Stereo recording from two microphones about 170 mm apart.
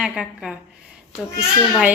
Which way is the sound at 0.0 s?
5° right (ahead or behind).